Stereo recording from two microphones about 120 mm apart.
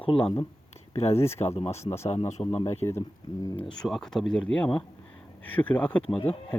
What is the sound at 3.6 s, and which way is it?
Speech, 5° left (ahead or behind).